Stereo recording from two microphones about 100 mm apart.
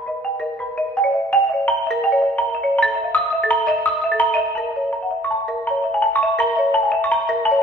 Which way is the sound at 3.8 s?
15° left (ahead or behind).